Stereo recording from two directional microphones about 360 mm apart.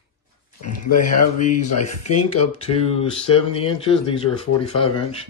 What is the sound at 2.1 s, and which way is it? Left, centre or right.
Speech, centre.